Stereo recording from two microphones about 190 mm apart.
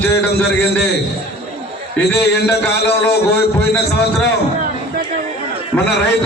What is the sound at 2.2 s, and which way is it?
A man's voice, 60° left (ahead or behind).